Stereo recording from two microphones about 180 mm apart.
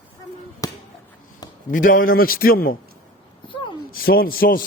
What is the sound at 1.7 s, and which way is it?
A man's voice, 50° left (ahead or behind).